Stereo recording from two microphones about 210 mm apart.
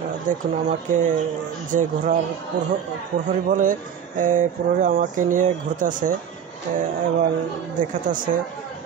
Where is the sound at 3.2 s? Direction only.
35° right (ahead or behind).